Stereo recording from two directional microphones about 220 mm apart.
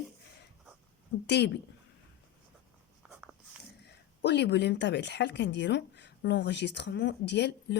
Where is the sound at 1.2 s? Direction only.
50° left (ahead or behind).